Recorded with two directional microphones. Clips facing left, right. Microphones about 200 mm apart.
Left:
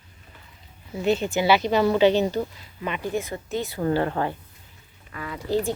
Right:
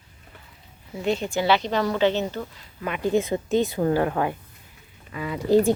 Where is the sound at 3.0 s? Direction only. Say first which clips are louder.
Right 10 dB; 20° right (ahead or behind).